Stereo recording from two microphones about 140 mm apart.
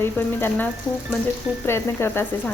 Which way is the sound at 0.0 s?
15° left (ahead or behind).